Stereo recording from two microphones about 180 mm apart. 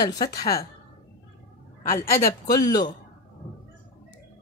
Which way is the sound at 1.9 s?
15° left (ahead or behind).